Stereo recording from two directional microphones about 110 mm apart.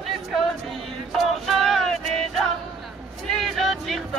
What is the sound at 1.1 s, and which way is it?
Music, centre (ahead or behind).